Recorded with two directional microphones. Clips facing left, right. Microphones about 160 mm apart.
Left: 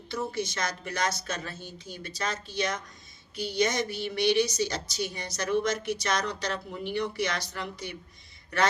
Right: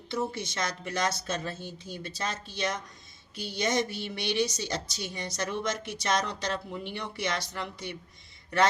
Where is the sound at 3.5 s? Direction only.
25° right (ahead or behind).